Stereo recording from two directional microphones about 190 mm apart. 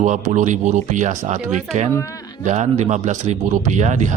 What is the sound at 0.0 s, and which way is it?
Speech, 40° right (ahead or behind).